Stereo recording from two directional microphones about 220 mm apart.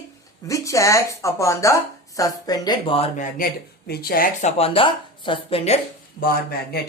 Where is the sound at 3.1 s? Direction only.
45° left (ahead or behind).